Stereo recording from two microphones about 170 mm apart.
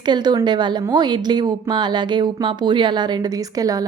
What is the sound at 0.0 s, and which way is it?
A woman's voice, 25° right (ahead or behind).